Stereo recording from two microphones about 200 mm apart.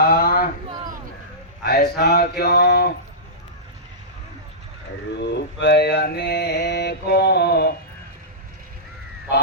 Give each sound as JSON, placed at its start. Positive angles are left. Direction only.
{"t": 0.0, "sound": "a sound", "side_deg": 50}
{"t": 1.6, "sound": "speech", "side_deg": 50}
{"t": 5.2, "sound": "mantra", "side_deg": 55}